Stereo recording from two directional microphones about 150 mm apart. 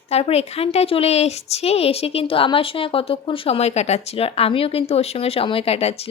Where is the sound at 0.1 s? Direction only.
45° left (ahead or behind).